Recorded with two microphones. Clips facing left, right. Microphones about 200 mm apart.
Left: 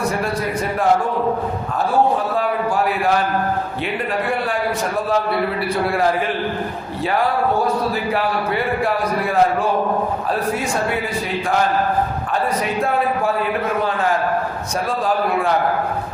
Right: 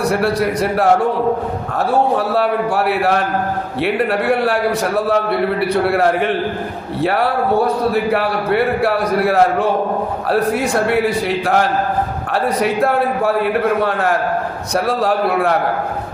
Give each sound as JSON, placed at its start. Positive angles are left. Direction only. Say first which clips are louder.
{"t": 0.1, "sound": "a man's voice", "louder": "right 5 dB", "side_deg": -75}
{"t": 2.1, "sound": "a man's voice", "louder": "right 4 dB", "side_deg": -70}
{"t": 12.8, "sound": "a man's voice", "louder": "right 1 dB", "side_deg": -65}